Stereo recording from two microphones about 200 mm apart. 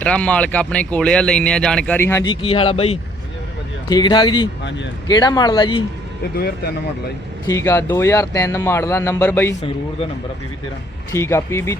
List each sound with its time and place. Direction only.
0.0 s speech: 5° left (ahead or behind)
2.3 s a man's voice: 25° left (ahead or behind)
6.3 s speech: 50° left (ahead or behind)
7.4 s speech: 15° left (ahead or behind)
11.1 s speech: 15° left (ahead or behind)